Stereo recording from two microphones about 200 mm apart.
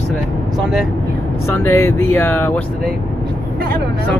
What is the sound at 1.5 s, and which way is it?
Speech, 10° left (ahead or behind).